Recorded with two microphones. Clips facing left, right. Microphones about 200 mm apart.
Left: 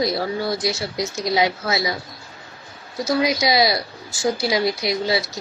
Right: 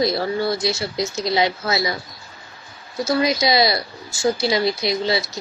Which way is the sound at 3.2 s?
10° left (ahead or behind).